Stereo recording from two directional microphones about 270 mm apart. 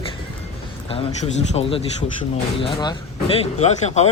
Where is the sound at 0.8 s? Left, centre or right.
Centre.